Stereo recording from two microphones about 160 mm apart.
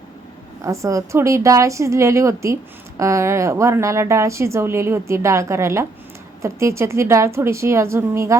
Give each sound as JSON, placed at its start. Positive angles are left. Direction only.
{"t": 0.6, "sound": "a woman's voice", "side_deg": -20}